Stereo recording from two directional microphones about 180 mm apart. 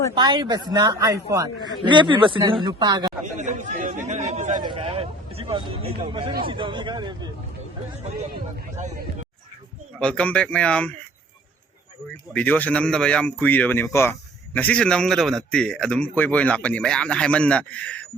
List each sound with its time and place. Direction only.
0.1 s a woman's voice: 25° right (ahead or behind)
3.3 s speech: 40° right (ahead or behind)
4.5 s a woman's voice: 25° right (ahead or behind)
8.8 s a man's voice: 40° right (ahead or behind)
10.0 s speech: 5° left (ahead or behind)
12.3 s speech: 10° left (ahead or behind)